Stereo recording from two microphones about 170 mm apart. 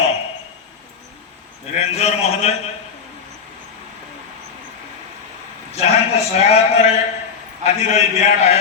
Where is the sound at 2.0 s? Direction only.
40° left (ahead or behind).